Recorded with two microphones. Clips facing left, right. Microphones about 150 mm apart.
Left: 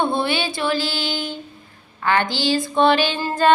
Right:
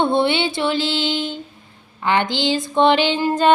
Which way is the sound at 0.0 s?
20° right (ahead or behind).